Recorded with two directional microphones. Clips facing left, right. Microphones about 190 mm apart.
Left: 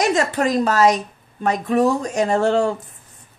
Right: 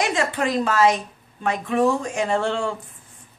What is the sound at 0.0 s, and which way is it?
A woman's voice, 40° left (ahead or behind).